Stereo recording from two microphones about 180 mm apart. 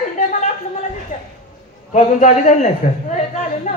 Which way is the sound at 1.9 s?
40° left (ahead or behind).